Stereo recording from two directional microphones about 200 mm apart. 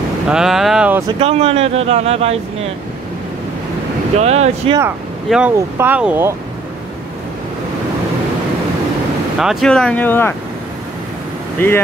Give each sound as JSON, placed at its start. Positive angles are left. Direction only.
{"t": 0.3, "sound": "speech", "side_deg": 0}
{"t": 1.0, "sound": "speech", "side_deg": -30}
{"t": 4.2, "sound": "speech", "side_deg": -30}
{"t": 5.3, "sound": "speech", "side_deg": -5}
{"t": 9.4, "sound": "speech", "side_deg": 0}
{"t": 11.6, "sound": "speech", "side_deg": 10}